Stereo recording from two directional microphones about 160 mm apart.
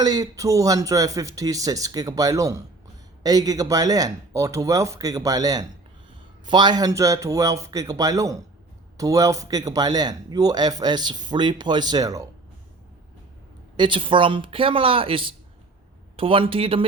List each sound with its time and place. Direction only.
0.0 s a man's voice: 25° right (ahead or behind)
13.7 s speech: 30° right (ahead or behind)